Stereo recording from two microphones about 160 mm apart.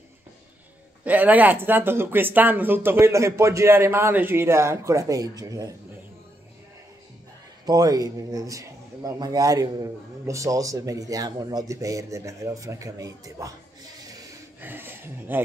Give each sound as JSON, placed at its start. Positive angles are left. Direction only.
{"t": 1.0, "sound": "speech", "side_deg": -10}
{"t": 7.6, "sound": "speech", "side_deg": -25}
{"t": 14.6, "sound": "speech", "side_deg": -15}